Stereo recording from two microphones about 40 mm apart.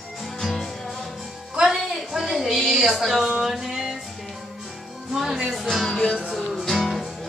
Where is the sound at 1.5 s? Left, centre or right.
Right.